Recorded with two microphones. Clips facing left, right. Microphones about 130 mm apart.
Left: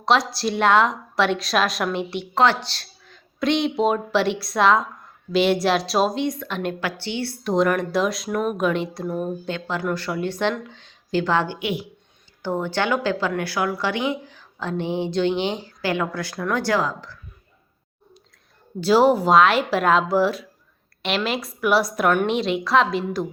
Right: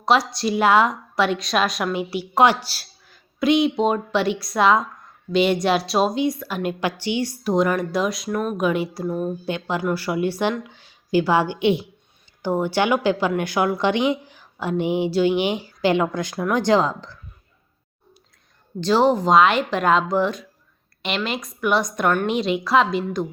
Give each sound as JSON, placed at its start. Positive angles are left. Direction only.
{"t": 0.0, "sound": "speech", "side_deg": 0}
{"t": 2.3, "sound": "a woman's voice", "side_deg": -15}
{"t": 7.4, "sound": "speech", "side_deg": 0}
{"t": 9.5, "sound": "a woman's voice", "side_deg": -15}
{"t": 11.6, "sound": "speech", "side_deg": -25}
{"t": 12.4, "sound": "a woman's voice", "side_deg": -15}
{"t": 18.8, "sound": "speech", "side_deg": 10}